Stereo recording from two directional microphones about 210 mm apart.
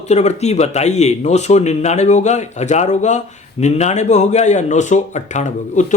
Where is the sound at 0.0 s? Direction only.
30° left (ahead or behind).